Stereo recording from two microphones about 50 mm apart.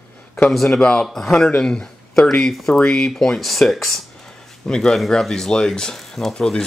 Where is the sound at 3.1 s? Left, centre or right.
Centre.